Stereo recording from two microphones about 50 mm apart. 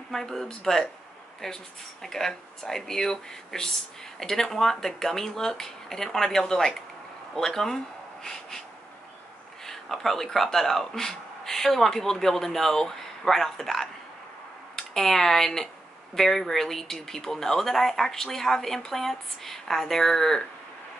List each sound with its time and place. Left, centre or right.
0.1 s speech: centre
9.7 s speech: centre